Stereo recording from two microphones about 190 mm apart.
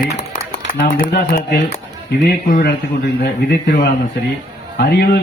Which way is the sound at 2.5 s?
60° left (ahead or behind).